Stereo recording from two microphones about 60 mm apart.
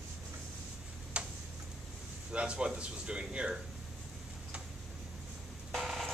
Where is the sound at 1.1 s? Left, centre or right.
Centre.